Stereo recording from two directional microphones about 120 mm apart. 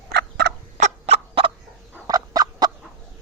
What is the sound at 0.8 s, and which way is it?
Fowl, 60° right (ahead or behind).